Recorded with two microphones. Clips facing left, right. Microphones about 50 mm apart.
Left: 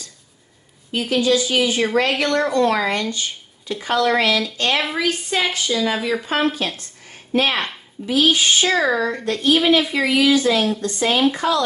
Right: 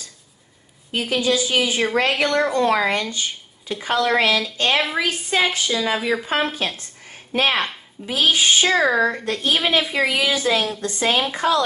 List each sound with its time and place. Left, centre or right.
0.9 s speech: centre
6.8 s a sound: right
7.5 s speech: centre
8.1 s speech: right
9.4 s speech: right